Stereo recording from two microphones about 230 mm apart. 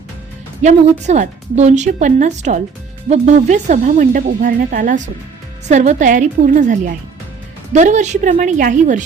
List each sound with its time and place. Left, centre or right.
0.6 s a woman's voice: right